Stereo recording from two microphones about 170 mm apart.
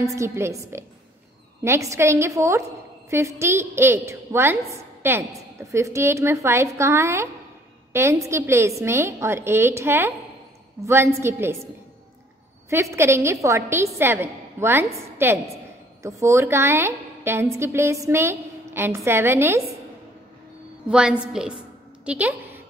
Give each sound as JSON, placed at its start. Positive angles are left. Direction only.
{"t": 0.0, "sound": "a woman's voice", "side_deg": -15}
{"t": 20.9, "sound": "a woman's voice", "side_deg": -5}